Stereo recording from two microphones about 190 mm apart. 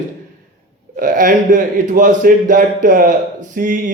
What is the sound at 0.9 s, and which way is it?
A man's voice, 45° right (ahead or behind).